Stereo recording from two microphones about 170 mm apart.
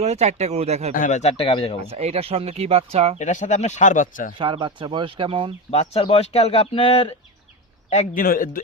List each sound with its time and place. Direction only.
0.0 s speech: 40° right (ahead or behind)
0.9 s speech: 45° left (ahead or behind)
1.9 s speech: 35° right (ahead or behind)
3.2 s speech: 45° left (ahead or behind)
4.4 s speech: 30° right (ahead or behind)
5.7 s speech: 35° left (ahead or behind)
7.9 s speech: 50° left (ahead or behind)